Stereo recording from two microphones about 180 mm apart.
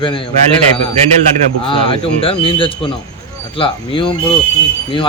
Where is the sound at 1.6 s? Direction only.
30° left (ahead or behind).